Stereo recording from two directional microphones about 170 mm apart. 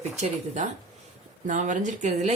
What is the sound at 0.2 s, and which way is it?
Speech, 45° right (ahead or behind).